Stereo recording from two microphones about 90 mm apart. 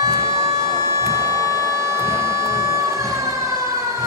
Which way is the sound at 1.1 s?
40° left (ahead or behind).